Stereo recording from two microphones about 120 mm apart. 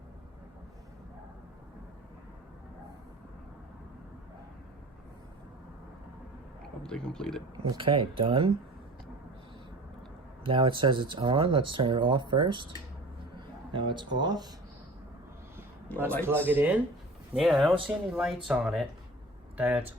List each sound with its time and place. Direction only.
6.8 s a man's voice: 5° left (ahead or behind)
7.5 s speech: 40° right (ahead or behind)
10.4 s speech: 45° right (ahead or behind)
13.7 s speech: 40° right (ahead or behind)
16.5 s speech: 15° right (ahead or behind)
17.3 s a man's voice: centre (ahead or behind)